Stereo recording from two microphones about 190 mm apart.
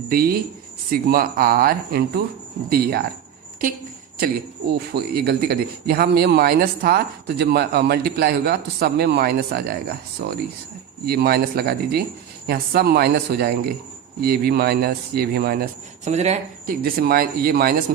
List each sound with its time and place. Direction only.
0.1 s speech: 50° right (ahead or behind)
4.7 s a man's voice: 55° right (ahead or behind)
16.0 s speech: 35° right (ahead or behind)
16.8 s speech: 50° right (ahead or behind)